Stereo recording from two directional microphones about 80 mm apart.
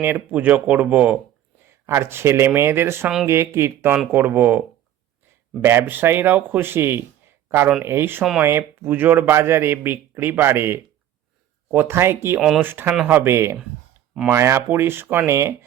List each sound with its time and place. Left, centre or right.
0.0 s speech: right
1.9 s speech: right
5.8 s a man's voice: right
12.4 s speech: centre
12.6 s speech: right